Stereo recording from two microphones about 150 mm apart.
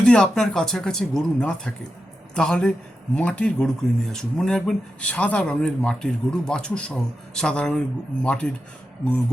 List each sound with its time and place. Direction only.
0.0 s speech: 5° left (ahead or behind)